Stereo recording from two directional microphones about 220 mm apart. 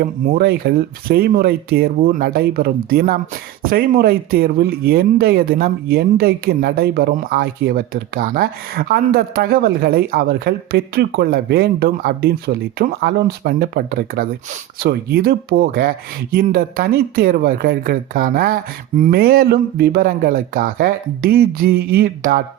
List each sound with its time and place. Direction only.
0.0 s speech: 40° right (ahead or behind)